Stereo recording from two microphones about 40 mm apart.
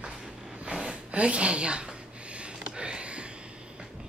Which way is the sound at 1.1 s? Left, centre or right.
Right.